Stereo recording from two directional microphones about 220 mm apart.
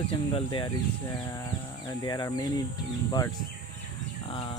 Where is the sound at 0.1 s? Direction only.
25° left (ahead or behind).